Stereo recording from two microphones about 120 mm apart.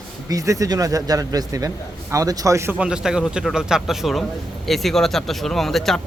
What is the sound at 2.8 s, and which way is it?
Speech, 5° right (ahead or behind).